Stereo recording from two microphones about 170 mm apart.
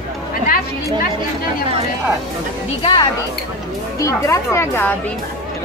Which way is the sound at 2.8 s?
30° left (ahead or behind).